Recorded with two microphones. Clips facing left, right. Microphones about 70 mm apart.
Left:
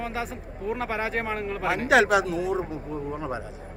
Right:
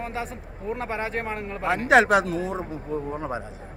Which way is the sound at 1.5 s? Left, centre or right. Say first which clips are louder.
Right 3 dB; right.